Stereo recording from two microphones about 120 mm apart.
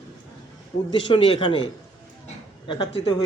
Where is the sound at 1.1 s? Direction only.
45° left (ahead or behind).